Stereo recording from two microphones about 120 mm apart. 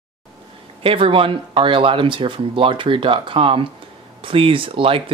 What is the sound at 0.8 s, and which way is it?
Speech, 50° right (ahead or behind).